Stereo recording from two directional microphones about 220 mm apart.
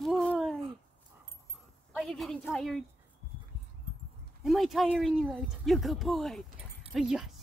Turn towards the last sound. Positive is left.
turn(degrees=0)  # may be behind; listen again after turning